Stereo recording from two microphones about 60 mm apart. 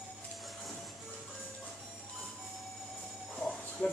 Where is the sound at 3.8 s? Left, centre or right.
Left.